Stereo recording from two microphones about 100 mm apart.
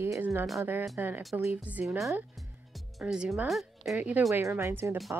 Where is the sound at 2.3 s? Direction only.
Centre (ahead or behind).